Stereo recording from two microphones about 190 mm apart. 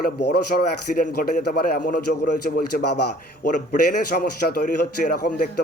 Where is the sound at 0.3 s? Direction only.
50° left (ahead or behind).